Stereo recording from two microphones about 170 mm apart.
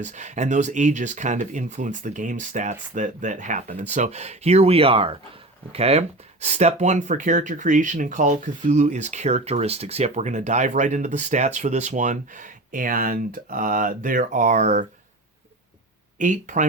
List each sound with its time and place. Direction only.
0.0 s speech: 45° right (ahead or behind)
16.1 s speech: 50° right (ahead or behind)